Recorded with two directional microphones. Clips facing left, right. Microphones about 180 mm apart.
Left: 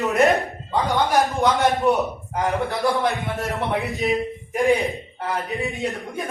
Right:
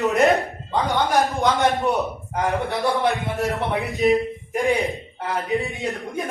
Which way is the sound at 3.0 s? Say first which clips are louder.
Right 2 dB; 20° right (ahead or behind).